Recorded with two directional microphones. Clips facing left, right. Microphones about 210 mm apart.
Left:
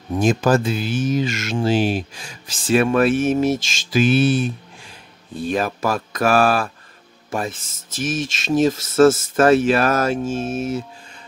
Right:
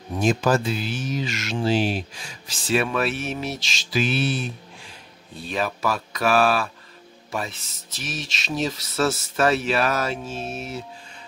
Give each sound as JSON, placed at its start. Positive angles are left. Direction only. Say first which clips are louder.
{"t": 0.2, "sound": "speech", "louder": "left 3 dB", "side_deg": 50}